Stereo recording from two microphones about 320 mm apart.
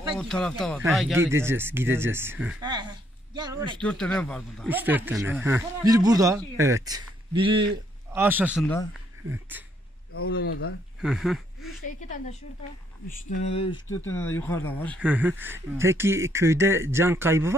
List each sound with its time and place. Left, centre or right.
0.1 s speech: centre
3.8 s a man's voice: centre
10.2 s speech: left
11.0 s speech: centre
13.4 s speech: centre
14.0 s speech: centre